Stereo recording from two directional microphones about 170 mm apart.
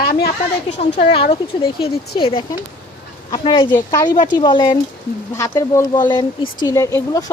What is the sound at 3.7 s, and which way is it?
Speech, 15° left (ahead or behind).